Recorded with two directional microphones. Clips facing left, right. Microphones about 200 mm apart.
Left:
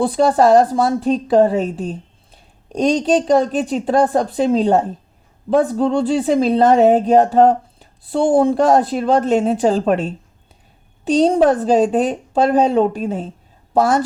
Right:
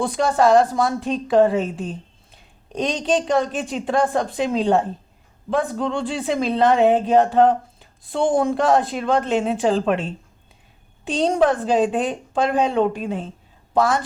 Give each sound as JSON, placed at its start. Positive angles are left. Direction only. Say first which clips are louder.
{"t": 0.0, "sound": "a woman's voice", "louder": "left 4 dB", "side_deg": 35}